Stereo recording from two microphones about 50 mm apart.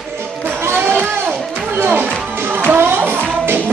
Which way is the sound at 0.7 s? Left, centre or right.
Right.